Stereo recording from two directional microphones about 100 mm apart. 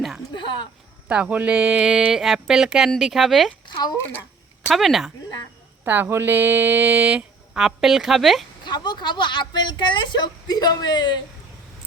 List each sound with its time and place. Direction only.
1.0 s speech: 10° right (ahead or behind)
4.7 s speech: centre (ahead or behind)
5.8 s a sound: 20° right (ahead or behind); by 8.4 s centre (ahead or behind)
8.6 s speech: 50° left (ahead or behind)